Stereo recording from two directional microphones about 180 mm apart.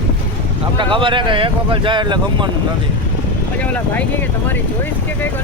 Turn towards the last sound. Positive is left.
turn(degrees=10)  # may be behind; listen again after turning